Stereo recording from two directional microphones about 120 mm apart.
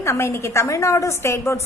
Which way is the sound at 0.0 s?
25° left (ahead or behind).